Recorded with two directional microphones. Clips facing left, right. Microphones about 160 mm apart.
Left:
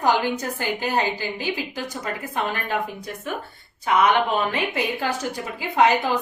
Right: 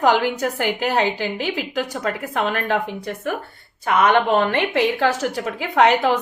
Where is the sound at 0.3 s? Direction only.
70° right (ahead or behind).